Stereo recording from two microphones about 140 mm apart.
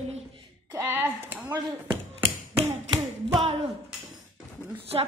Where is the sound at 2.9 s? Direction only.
35° right (ahead or behind).